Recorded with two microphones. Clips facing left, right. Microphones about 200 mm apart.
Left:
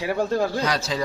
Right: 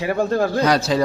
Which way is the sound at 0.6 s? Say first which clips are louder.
Right 7 dB; 60° right (ahead or behind).